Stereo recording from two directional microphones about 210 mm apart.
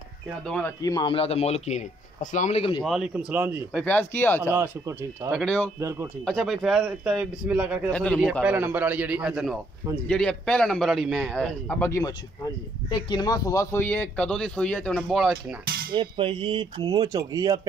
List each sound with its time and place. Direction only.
0.8 s speech: 20° left (ahead or behind)
2.8 s speech: centre (ahead or behind)
3.8 s speech: 10° left (ahead or behind)
4.4 s a man's voice: 10° right (ahead or behind)
5.3 s speech: 5° left (ahead or behind)
5.8 s a man's voice: 15° right (ahead or behind)
6.2 s speech: centre (ahead or behind)
7.9 s speech: 5° left (ahead or behind)
8.5 s a man's voice: 10° right (ahead or behind)
15.6 s cutlery: 45° right (ahead or behind)
15.9 s speech: 25° right (ahead or behind)